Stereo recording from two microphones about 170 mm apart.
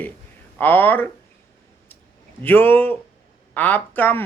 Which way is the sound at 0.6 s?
10° left (ahead or behind).